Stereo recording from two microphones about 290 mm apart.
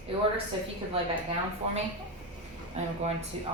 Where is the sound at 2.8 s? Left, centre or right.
Right.